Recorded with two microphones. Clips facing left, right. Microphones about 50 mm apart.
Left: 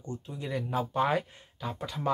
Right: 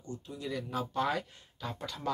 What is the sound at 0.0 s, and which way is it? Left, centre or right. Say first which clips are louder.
Speech: left 2 dB; left.